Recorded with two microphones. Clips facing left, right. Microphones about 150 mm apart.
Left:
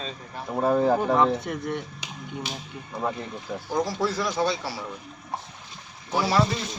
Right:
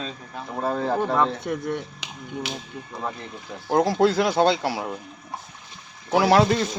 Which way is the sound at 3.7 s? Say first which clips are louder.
Right 7 dB; 60° right (ahead or behind).